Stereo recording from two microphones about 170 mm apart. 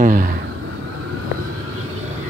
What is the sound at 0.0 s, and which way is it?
Speech, 50° right (ahead or behind).